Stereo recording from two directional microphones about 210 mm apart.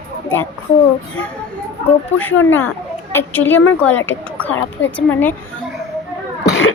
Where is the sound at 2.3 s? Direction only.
65° left (ahead or behind).